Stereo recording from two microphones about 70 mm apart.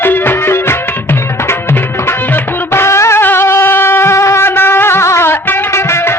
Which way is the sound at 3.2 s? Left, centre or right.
Left.